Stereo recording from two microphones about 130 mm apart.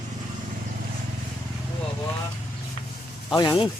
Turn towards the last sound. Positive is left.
turn(degrees=35)  # may be behind; listen again after turning